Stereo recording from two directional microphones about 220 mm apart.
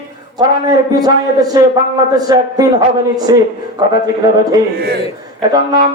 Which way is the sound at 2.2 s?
15° right (ahead or behind).